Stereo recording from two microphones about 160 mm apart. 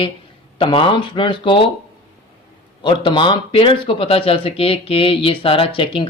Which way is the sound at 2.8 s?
30° left (ahead or behind).